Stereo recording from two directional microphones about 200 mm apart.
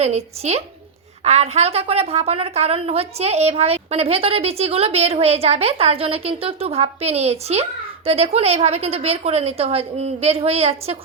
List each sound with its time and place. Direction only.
0.0 s a woman's voice: 30° right (ahead or behind)